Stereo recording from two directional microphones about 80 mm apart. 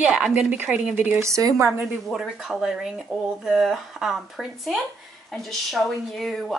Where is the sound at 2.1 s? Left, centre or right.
Centre.